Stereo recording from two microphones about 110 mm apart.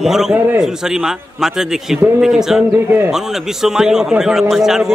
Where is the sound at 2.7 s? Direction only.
20° right (ahead or behind).